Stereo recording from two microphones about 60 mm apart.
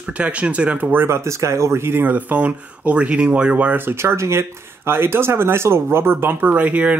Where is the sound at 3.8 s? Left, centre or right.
Right.